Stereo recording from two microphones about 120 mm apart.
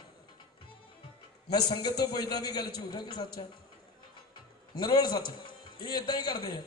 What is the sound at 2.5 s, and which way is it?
Speech, 35° left (ahead or behind).